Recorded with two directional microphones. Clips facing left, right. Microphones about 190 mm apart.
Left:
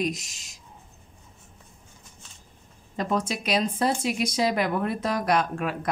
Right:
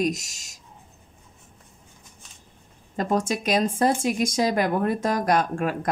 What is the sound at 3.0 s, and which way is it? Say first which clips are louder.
Speech: right 3 dB; 45° right (ahead or behind).